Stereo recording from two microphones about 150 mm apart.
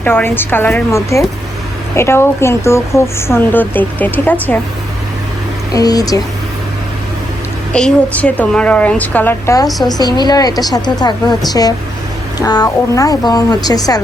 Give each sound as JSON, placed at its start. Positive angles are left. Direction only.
{"t": 0.0, "sound": "speech", "side_deg": 15}
{"t": 5.7, "sound": "a woman's voice", "side_deg": 25}
{"t": 7.7, "sound": "speech", "side_deg": 5}
{"t": 9.6, "sound": "a woman's voice", "side_deg": 0}
{"t": 10.0, "sound": "a woman's voice", "side_deg": 25}